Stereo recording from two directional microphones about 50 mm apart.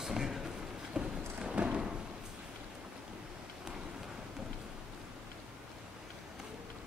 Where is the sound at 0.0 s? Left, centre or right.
Centre.